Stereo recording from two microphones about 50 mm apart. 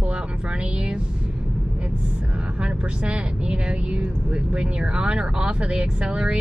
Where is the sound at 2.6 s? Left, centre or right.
Right.